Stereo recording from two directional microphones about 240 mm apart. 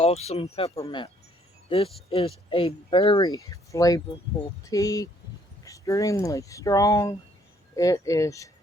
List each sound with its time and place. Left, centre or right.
0.0 s speech: left